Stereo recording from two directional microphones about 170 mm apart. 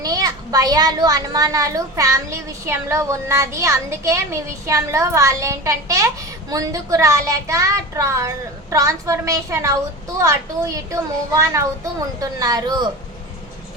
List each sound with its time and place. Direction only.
0.0 s a child's voice: 20° right (ahead or behind)